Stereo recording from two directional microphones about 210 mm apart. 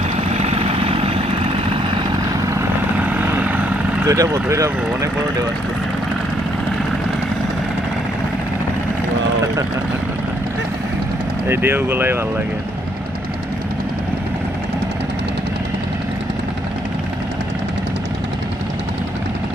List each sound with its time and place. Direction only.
0.3 s vehicle: 30° right (ahead or behind)
2.6 s vehicle: 10° right (ahead or behind)
4.0 s speech: 15° right (ahead or behind)
11.4 s speech: 10° right (ahead or behind)